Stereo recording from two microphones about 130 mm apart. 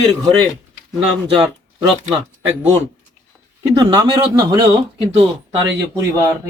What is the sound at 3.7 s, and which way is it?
Speech, 30° right (ahead or behind).